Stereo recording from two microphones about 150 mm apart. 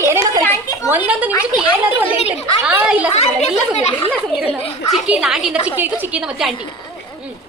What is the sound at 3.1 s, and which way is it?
A woman's voice, 45° left (ahead or behind).